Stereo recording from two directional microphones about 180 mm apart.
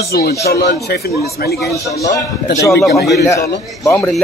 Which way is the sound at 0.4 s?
65° left (ahead or behind).